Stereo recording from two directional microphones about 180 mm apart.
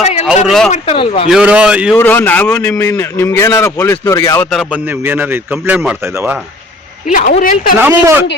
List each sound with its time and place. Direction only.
0.0 s speech: 35° left (ahead or behind)
0.4 s a man's voice: centre (ahead or behind)
0.7 s speech: 35° left (ahead or behind)
1.3 s a man's voice: 5° right (ahead or behind)
2.0 s a man's voice: 10° left (ahead or behind)
4.5 s speech: 10° right (ahead or behind)
7.1 s a woman's voice: 45° left (ahead or behind)
7.8 s speech: 10° right (ahead or behind)